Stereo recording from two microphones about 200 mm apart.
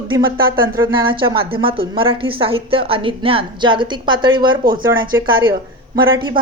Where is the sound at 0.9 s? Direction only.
25° right (ahead or behind).